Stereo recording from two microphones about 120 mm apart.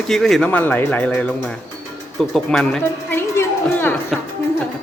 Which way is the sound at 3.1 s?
20° left (ahead or behind).